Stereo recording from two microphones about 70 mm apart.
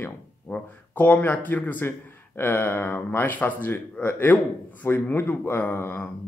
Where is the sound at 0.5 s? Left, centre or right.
Left.